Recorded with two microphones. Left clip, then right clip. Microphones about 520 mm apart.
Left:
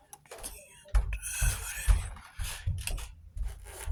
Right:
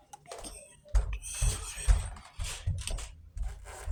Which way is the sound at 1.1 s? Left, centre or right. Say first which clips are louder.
Left 3 dB; left.